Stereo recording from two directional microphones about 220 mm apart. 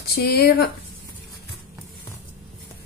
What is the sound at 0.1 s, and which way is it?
Speech, 45° left (ahead or behind).